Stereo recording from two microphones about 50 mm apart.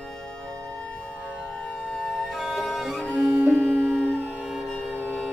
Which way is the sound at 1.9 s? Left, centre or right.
Centre.